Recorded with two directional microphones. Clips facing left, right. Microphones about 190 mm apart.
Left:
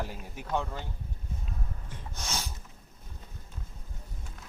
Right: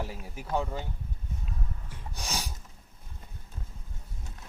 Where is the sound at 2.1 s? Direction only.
10° right (ahead or behind).